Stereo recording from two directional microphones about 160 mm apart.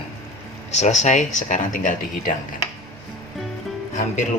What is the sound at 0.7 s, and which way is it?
Speech, 45° left (ahead or behind).